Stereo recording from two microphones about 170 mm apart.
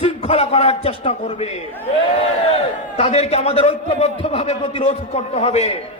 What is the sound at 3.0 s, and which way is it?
A man's voice, 40° left (ahead or behind).